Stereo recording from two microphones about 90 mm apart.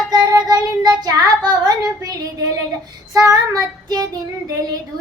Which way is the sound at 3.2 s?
45° right (ahead or behind).